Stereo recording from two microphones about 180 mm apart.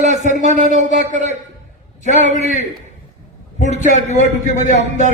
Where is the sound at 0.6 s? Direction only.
40° right (ahead or behind).